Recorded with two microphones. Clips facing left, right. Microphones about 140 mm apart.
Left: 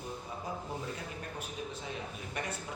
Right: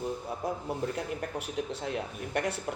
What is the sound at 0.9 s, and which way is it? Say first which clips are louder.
Speech: right 7 dB; 70° right (ahead or behind).